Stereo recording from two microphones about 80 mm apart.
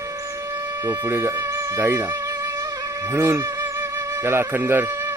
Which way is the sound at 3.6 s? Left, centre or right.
Right.